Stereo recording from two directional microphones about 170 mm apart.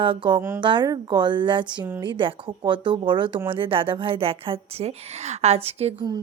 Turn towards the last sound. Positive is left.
turn(degrees=-35)  # may be behind; listen again after turning